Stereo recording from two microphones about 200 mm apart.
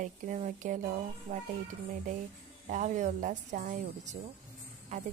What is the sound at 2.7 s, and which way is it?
Speech, 40° right (ahead or behind).